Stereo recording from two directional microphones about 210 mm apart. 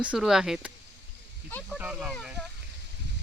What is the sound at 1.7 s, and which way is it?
Speech, 5° right (ahead or behind).